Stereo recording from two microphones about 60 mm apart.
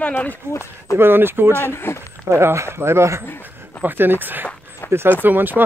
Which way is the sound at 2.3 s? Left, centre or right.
Right.